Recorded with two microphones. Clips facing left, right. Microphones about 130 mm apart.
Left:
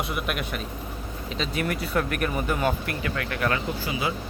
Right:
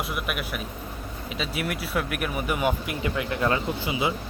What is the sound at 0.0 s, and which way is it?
Speech, centre (ahead or behind).